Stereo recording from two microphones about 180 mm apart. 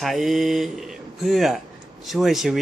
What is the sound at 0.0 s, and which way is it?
Speech, centre (ahead or behind).